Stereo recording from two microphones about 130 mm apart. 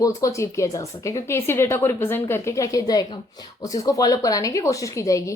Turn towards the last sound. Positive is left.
turn(degrees=25)  # may be behind; listen again after turning